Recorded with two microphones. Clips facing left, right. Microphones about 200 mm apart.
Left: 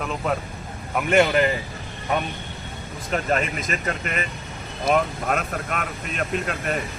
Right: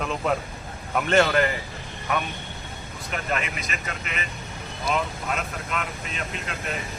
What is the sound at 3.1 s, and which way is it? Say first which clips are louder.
Speech: left 6 dB; 40° left (ahead or behind).